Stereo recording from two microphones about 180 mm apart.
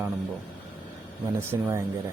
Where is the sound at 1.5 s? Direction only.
10° right (ahead or behind).